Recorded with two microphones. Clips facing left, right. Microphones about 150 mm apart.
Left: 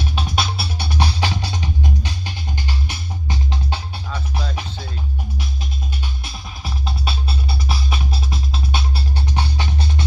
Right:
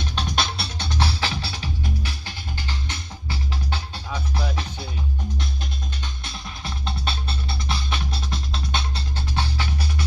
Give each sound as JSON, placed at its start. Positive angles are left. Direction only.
{"t": 0.0, "sound": "music", "side_deg": 5}
{"t": 4.1, "sound": "music", "side_deg": -10}
{"t": 6.2, "sound": "music", "side_deg": 5}